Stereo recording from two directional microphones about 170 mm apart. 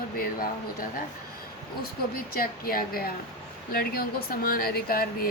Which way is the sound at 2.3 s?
60° left (ahead or behind).